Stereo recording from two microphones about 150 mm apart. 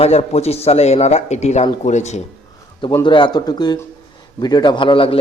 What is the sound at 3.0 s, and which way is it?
A man's voice, 30° left (ahead or behind).